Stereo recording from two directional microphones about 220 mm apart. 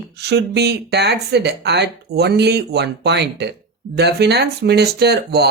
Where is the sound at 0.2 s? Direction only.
50° right (ahead or behind).